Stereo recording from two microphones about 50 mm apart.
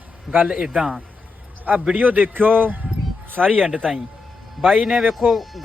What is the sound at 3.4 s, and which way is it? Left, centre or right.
Speech, centre.